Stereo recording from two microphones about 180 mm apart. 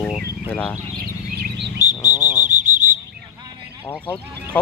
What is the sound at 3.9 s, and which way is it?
Speech, 10° left (ahead or behind).